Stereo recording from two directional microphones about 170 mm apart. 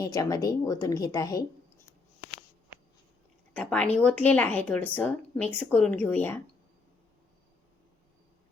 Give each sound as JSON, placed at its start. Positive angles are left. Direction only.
{"t": 0.0, "sound": "a woman's voice", "side_deg": 20}
{"t": 3.5, "sound": "speech", "side_deg": 10}